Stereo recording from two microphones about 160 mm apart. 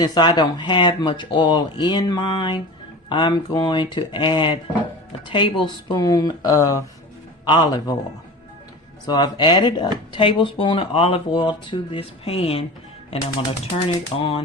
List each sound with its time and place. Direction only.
0.0 s speech: 25° left (ahead or behind)
9.0 s speech: 25° left (ahead or behind)
13.8 s speech: 35° left (ahead or behind)